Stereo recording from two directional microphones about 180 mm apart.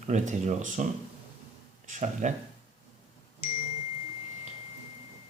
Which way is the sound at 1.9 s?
40° right (ahead or behind).